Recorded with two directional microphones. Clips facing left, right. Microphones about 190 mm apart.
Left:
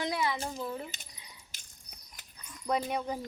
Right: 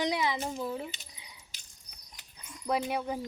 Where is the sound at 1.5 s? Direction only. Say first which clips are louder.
Left 1 dB; 50° left (ahead or behind).